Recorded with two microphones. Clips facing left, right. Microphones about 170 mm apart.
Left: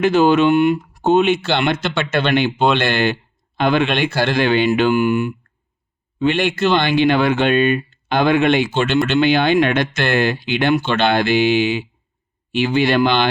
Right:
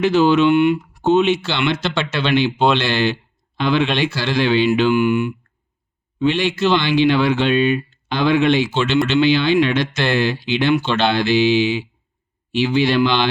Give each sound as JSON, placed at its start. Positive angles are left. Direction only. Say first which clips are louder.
{"t": 0.0, "sound": "speech", "louder": "left 1 dB", "side_deg": 50}
{"t": 6.1, "sound": "speech", "louder": "left 1 dB", "side_deg": 55}